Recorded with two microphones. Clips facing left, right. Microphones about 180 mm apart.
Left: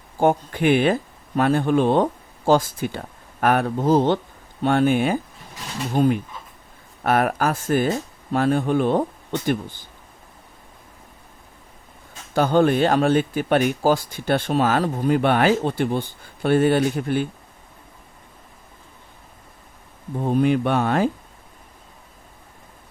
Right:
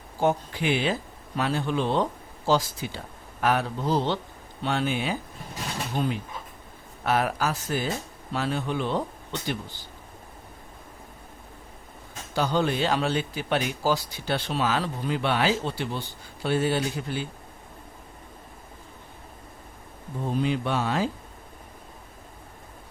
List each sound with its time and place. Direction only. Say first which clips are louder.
0.2 s speech: left 6 dB; 55° left (ahead or behind)
12.3 s speech: left 7 dB; 55° left (ahead or behind)
20.2 s speech: left 7 dB; 55° left (ahead or behind)